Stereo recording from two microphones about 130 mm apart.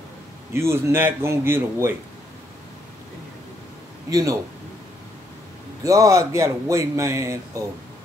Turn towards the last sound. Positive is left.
turn(degrees=-25)  # may be behind; listen again after turning